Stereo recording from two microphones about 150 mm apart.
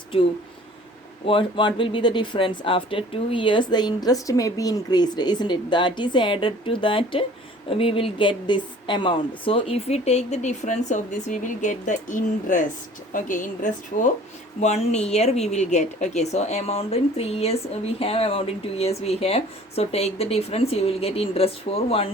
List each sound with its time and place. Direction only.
1.2 s a woman's voice: 35° left (ahead or behind); by 14.1 s 60° left (ahead or behind)
14.6 s speech: 45° left (ahead or behind)